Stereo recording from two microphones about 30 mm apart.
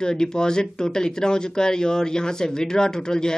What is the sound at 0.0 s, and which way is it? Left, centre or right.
Speech, left.